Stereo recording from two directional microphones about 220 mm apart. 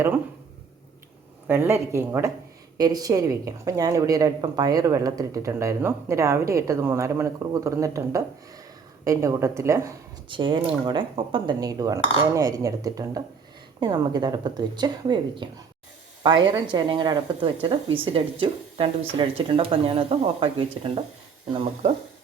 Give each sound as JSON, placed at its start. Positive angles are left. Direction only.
{"t": 1.5, "sound": "a woman's voice", "side_deg": -10}
{"t": 16.5, "sound": "a woman's voice", "side_deg": -20}